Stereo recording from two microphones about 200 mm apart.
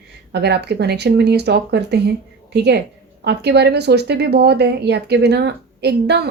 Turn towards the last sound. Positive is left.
turn(degrees=-55)  # may be behind; listen again after turning